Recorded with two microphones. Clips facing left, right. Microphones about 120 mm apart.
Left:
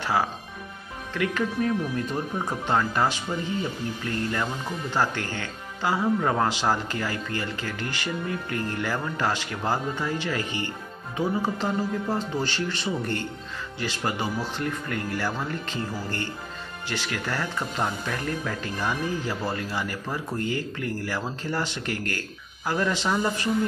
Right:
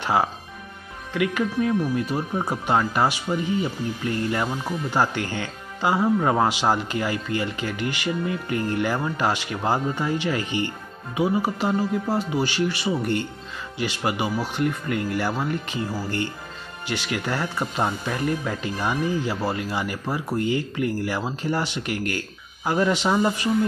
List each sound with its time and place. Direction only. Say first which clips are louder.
0.0 s speech: right 3 dB; 20° right (ahead or behind)